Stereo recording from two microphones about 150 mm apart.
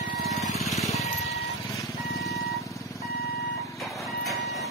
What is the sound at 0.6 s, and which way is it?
Music, centre (ahead or behind).